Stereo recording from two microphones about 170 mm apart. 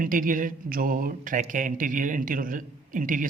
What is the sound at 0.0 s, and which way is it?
Speech, 55° right (ahead or behind).